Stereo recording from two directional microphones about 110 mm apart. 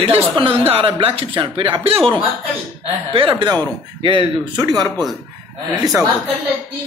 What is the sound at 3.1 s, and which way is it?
Speech, 50° right (ahead or behind).